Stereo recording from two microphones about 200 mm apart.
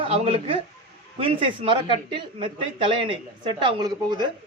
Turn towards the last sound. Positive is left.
turn(degrees=-20)  # may be behind; listen again after turning